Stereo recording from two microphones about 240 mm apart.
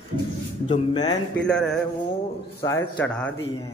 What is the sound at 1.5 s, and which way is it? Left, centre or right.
Speech, centre.